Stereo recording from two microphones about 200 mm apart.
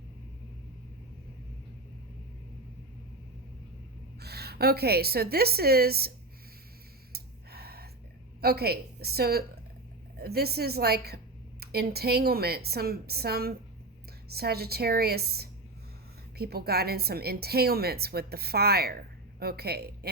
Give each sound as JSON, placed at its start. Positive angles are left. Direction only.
{"t": 4.2, "sound": "a woman's voice", "side_deg": -55}
{"t": 7.1, "sound": "gasp", "side_deg": -50}
{"t": 8.4, "sound": "a woman's voice", "side_deg": -50}